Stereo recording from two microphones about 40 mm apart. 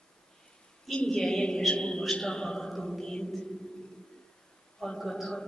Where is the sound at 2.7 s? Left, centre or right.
Centre.